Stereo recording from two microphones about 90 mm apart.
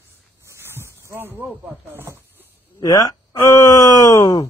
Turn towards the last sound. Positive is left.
turn(degrees=40)  # may be behind; listen again after turning